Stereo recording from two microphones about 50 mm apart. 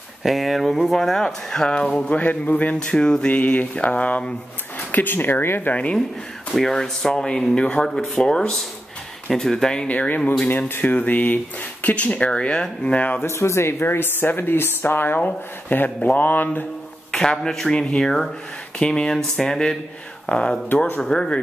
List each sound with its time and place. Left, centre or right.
0.2 s speech: centre
2.0 s speech: left
4.9 s speech: left
5.7 s speech: left
6.5 s speech: centre
9.8 s speech: left
12.8 s speech: left
13.2 s speech: left
15.1 s speech: left
17.1 s speech: centre